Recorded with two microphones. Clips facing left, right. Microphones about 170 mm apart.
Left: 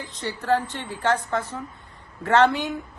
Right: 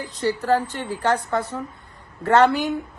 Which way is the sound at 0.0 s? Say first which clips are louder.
Right 7 dB; 35° right (ahead or behind).